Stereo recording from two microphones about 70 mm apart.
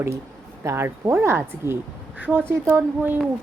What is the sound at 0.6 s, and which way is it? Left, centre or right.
Speech, right.